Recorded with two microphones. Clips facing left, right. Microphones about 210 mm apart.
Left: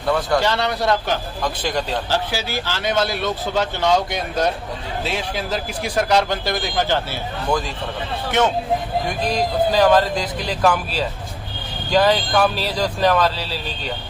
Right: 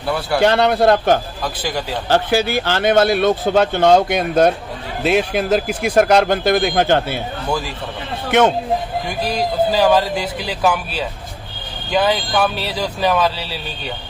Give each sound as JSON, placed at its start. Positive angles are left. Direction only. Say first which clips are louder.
{"t": 0.0, "sound": "a man's voice", "louder": "even", "side_deg": -5}
{"t": 0.4, "sound": "speech", "louder": "right 7 dB", "side_deg": -55}
{"t": 1.6, "sound": "a man's voice", "louder": "even", "side_deg": -5}
{"t": 2.0, "sound": "speech", "louder": "right 7 dB", "side_deg": -55}
{"t": 9.7, "sound": "speech", "louder": "left 1 dB", "side_deg": -5}